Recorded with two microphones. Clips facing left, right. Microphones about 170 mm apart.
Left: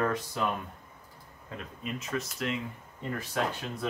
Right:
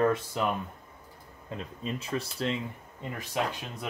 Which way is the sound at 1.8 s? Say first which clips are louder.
Right 1 dB; 30° right (ahead or behind).